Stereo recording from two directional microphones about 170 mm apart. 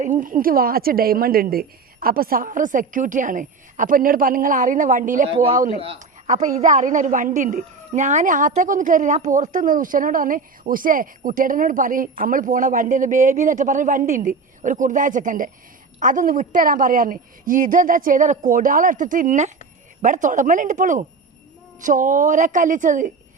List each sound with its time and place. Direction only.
0.0 s a woman's voice: 50° right (ahead or behind)